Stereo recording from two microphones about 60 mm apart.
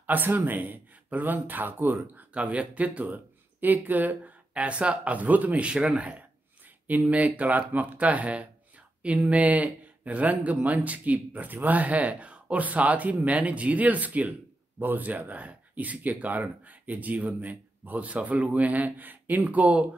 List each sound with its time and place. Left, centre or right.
0.0 s speech: right
2.1 s speech: right